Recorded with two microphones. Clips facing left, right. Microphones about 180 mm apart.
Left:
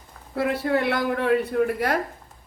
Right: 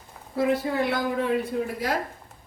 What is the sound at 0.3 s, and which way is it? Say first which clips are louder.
A woman's voice: left 1 dB; 65° left (ahead or behind).